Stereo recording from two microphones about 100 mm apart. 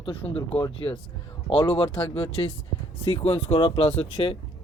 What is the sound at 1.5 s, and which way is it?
Speech, 60° left (ahead or behind).